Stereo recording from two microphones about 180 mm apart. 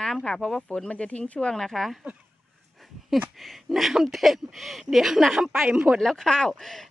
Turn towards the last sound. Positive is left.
turn(degrees=0)  # may be behind; listen again after turning